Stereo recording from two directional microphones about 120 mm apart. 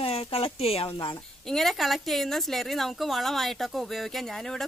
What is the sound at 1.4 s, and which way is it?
Speech, 5° left (ahead or behind).